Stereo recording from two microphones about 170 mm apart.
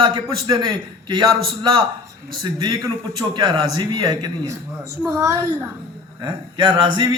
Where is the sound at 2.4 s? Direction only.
25° right (ahead or behind).